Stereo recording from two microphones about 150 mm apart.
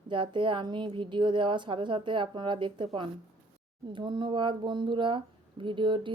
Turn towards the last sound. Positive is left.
turn(degrees=-35)  # may be behind; listen again after turning